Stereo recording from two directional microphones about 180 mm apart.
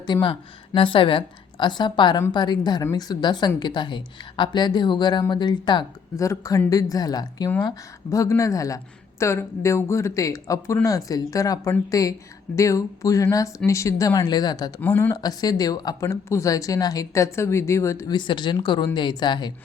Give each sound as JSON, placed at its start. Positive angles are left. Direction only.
{"t": 0.0, "sound": "a woman's voice", "side_deg": 25}
{"t": 14.8, "sound": "a woman's voice", "side_deg": 10}